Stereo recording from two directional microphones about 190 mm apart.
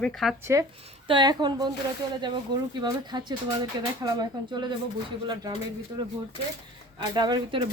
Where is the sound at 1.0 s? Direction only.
25° right (ahead or behind).